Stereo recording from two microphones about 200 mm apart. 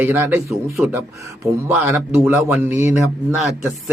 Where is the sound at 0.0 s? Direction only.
10° right (ahead or behind).